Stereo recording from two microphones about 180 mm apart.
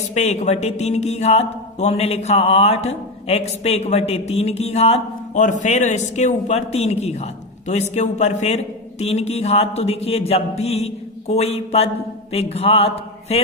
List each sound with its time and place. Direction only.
0.1 s speech: 40° left (ahead or behind)